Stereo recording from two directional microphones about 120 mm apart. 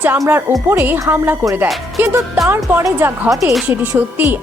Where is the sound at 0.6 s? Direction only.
15° right (ahead or behind).